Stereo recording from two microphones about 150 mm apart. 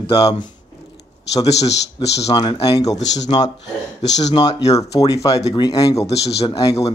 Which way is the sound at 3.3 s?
35° left (ahead or behind).